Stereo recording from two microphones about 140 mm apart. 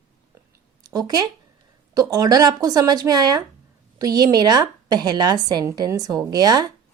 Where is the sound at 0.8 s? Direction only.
25° right (ahead or behind).